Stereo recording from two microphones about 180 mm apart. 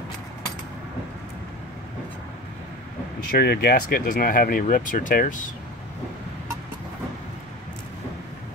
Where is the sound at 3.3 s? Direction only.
60° left (ahead or behind).